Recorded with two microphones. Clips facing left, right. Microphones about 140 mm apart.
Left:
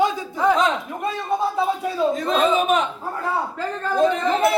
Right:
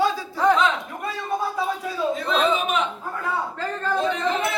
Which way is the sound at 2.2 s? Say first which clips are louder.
Left 1 dB; 40° left (ahead or behind).